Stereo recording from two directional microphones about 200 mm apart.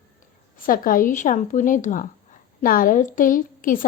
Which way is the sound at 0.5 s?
45° left (ahead or behind).